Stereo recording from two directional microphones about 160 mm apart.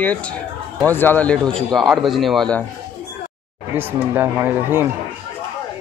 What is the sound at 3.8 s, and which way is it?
A man's voice, 10° right (ahead or behind).